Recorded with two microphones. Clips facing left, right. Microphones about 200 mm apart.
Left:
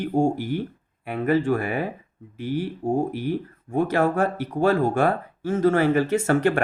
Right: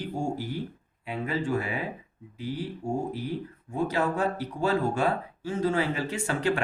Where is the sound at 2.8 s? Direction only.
55° left (ahead or behind).